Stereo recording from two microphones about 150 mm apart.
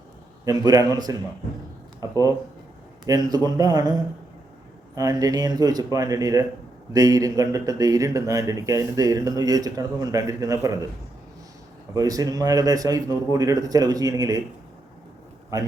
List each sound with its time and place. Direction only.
0.4 s speech: 25° right (ahead or behind)
11.9 s speech: 25° right (ahead or behind)